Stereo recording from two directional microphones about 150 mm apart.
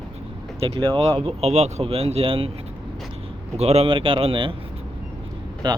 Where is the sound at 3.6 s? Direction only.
45° right (ahead or behind).